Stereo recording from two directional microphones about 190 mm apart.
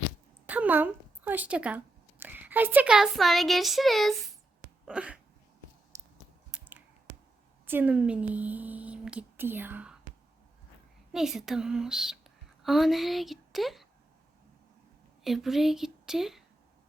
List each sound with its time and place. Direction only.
0.4 s speech: 10° right (ahead or behind)
4.9 s a sound: 5° right (ahead or behind)
5.9 s a sound: 15° right (ahead or behind)
6.5 s finger snapping: 10° right (ahead or behind)
7.7 s speech: 10° right (ahead or behind)
11.1 s a woman's voice: centre (ahead or behind)
15.2 s a woman's voice: centre (ahead or behind)